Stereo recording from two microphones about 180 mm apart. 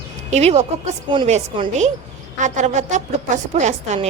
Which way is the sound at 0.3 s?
35° right (ahead or behind).